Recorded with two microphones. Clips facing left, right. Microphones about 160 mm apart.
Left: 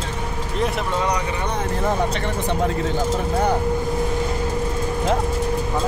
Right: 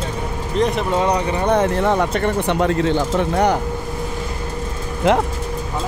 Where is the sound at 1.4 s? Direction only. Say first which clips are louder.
Right 8 dB; 70° right (ahead or behind).